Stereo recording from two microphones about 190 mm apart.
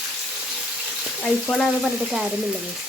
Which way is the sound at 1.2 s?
5° left (ahead or behind).